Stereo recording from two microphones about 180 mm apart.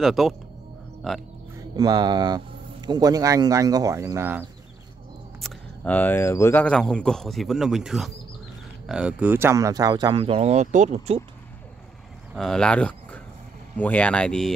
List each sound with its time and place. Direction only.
0.0 s speech: centre (ahead or behind)
1.8 s speech: 20° right (ahead or behind)
5.4 s speech: 10° left (ahead or behind); by 11.2 s 40° right (ahead or behind)
12.4 s speech: 5° left (ahead or behind)